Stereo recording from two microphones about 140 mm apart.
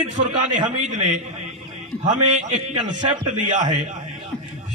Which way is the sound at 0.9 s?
55° right (ahead or behind).